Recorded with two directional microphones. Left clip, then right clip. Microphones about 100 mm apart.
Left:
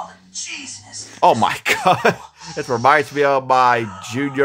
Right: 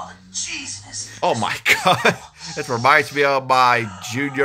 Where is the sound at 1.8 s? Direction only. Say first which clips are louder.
Left 1 dB; 35° left (ahead or behind).